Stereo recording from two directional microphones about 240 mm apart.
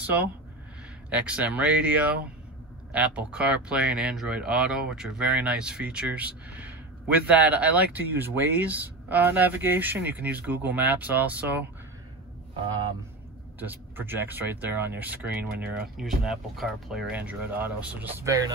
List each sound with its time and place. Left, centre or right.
0.0 s speech: centre
13.6 s speech: centre